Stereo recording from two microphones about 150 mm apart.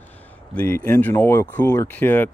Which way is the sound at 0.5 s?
10° left (ahead or behind).